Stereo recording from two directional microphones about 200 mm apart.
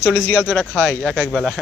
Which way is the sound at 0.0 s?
10° left (ahead or behind).